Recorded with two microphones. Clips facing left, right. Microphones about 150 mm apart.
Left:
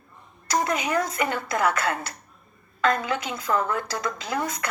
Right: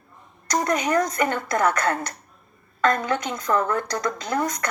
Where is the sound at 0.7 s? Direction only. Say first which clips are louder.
Right 3 dB; 45° right (ahead or behind).